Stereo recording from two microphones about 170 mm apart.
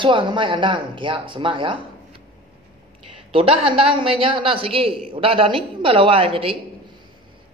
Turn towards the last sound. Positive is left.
turn(degrees=-35)  # may be behind; listen again after turning